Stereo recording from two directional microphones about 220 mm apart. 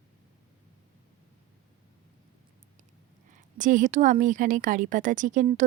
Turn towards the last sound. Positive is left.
turn(degrees=-35)  # may be behind; listen again after turning